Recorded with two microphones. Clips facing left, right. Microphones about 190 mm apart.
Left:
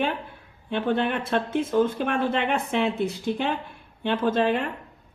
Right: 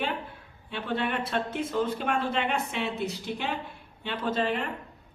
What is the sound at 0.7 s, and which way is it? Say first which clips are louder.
Speech: left 6 dB; 55° left (ahead or behind).